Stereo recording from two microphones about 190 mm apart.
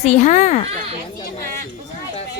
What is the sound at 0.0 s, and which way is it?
Speech, 40° left (ahead or behind).